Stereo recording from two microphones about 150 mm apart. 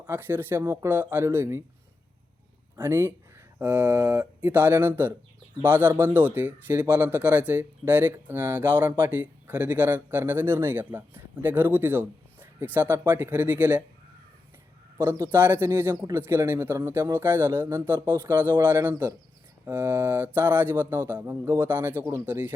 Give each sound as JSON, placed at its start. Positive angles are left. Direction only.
{"t": 0.1, "sound": "speech", "side_deg": -15}
{"t": 2.7, "sound": "speech", "side_deg": -20}
{"t": 15.3, "sound": "speech", "side_deg": -15}